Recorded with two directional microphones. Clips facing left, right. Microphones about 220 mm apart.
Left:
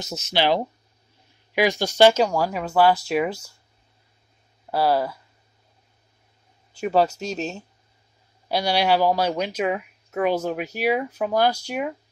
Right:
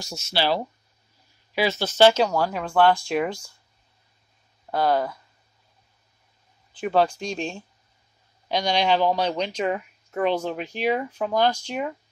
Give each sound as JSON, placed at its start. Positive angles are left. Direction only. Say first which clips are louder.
{"t": 0.0, "sound": "speech", "louder": "left 3 dB", "side_deg": 20}
{"t": 4.6, "sound": "speech", "louder": "left 1 dB", "side_deg": 5}
{"t": 6.8, "sound": "speech", "louder": "left 1 dB", "side_deg": 5}